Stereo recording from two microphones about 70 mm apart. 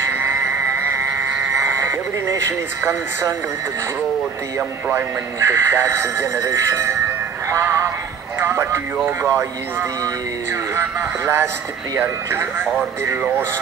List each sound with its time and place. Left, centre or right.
0.1 s music: right
4.9 s speech: right
6.3 s speech: right
7.6 s music: right
8.4 s a sound: right
9.2 s speech: right